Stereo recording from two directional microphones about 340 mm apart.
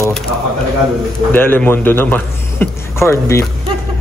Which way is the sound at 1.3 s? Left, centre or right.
Centre.